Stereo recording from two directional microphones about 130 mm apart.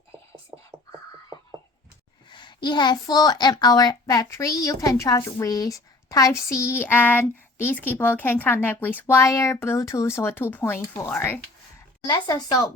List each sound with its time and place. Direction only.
0.5 s a sound: 25° right (ahead or behind)
2.3 s a child's voice: 35° left (ahead or behind); by 11.3 s 15° left (ahead or behind)
12.0 s speech: 35° left (ahead or behind)